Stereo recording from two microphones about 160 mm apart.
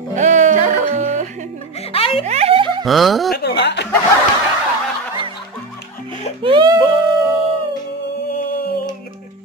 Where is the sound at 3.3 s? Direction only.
90° left.